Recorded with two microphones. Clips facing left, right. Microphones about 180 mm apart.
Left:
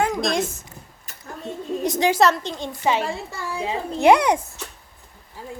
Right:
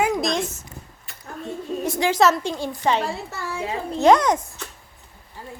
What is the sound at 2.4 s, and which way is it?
Speech, 10° right (ahead or behind).